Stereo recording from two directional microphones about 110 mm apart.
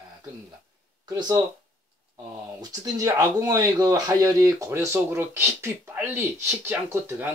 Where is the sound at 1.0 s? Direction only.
40° right (ahead or behind).